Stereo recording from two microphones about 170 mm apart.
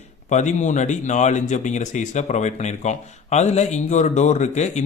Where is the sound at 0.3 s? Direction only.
45° left (ahead or behind).